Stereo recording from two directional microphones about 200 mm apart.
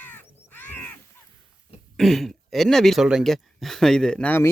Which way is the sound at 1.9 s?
Centre (ahead or behind).